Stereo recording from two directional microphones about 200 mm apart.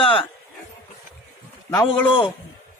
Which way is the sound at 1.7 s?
25° left (ahead or behind).